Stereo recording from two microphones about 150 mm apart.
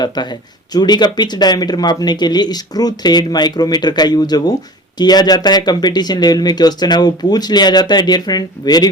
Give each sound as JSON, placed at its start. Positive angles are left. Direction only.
{"t": 0.7, "sound": "speech", "side_deg": 30}